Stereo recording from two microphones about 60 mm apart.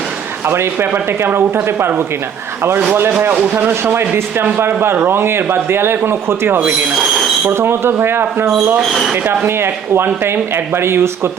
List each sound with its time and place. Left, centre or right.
0.4 s speech: right
3.5 s speech: right
6.9 s speech: centre
7.5 s speech: right
8.8 s speech: centre
9.1 s speech: right